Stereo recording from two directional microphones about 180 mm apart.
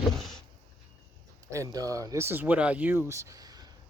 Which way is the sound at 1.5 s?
15° right (ahead or behind).